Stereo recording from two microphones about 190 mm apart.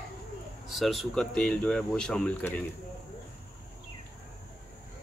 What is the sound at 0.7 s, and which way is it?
Speech, centre (ahead or behind).